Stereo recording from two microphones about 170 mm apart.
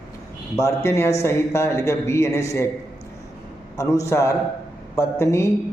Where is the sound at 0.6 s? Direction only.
15° left (ahead or behind).